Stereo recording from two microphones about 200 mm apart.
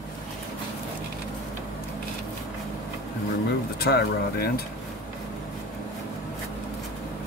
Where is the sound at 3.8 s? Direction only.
50° left (ahead or behind).